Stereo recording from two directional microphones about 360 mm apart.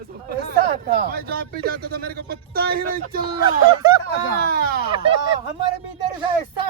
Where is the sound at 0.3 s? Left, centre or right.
Right.